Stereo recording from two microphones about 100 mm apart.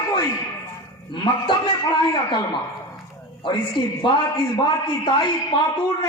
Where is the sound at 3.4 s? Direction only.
55° left (ahead or behind).